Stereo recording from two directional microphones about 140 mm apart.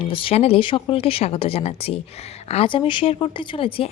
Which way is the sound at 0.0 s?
40° left (ahead or behind).